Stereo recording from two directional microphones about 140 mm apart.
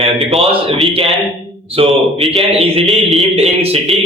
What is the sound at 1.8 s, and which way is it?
Speech, 40° right (ahead or behind).